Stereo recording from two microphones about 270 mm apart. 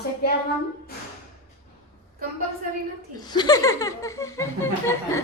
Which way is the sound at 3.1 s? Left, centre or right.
Centre.